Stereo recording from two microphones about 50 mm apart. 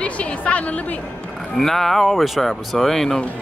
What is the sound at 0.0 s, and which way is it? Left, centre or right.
Speech, left.